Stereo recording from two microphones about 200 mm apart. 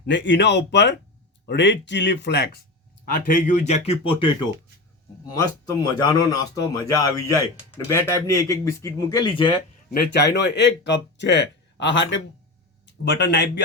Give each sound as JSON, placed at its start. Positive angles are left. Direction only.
{"t": 0.0, "sound": "speech", "side_deg": 60}
{"t": 3.1, "sound": "speech", "side_deg": 45}
{"t": 9.9, "sound": "speech", "side_deg": 55}